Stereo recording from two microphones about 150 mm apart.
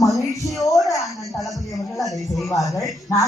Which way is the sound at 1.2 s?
Centre (ahead or behind).